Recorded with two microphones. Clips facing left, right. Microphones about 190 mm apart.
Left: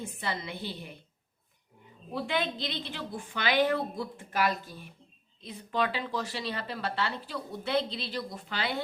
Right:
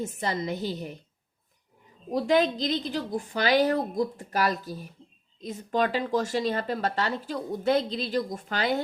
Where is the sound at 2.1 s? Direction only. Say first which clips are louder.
Right 8 dB; 40° right (ahead or behind).